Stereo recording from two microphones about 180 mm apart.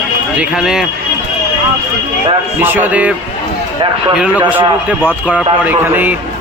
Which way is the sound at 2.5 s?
10° right (ahead or behind).